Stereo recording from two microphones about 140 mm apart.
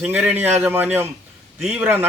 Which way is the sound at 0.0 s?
15° right (ahead or behind).